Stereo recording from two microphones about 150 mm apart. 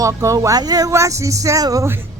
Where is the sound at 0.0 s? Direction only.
20° right (ahead or behind).